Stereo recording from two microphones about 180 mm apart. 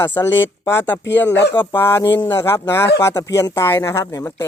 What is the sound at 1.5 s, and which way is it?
Speech, 15° left (ahead or behind).